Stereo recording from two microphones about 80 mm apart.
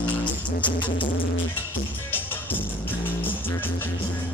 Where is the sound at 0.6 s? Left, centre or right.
Left.